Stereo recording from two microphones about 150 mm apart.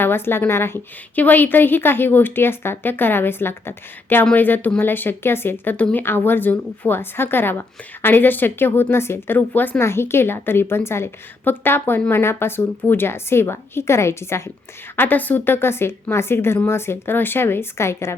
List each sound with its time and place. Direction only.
0.0 s a woman's voice: 15° left (ahead or behind)